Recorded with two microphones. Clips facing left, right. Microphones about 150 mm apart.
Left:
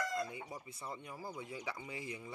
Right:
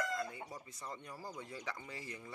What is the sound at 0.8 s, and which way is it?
Speech, 10° left (ahead or behind).